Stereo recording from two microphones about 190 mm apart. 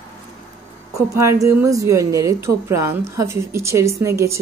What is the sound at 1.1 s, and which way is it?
Speech, 15° right (ahead or behind).